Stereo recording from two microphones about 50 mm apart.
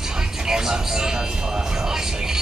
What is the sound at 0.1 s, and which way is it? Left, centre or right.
Music, centre.